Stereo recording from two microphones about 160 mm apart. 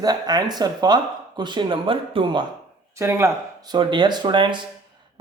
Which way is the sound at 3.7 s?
30° right (ahead or behind).